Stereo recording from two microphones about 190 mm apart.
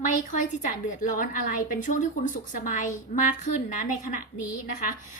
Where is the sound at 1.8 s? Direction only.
40° left (ahead or behind).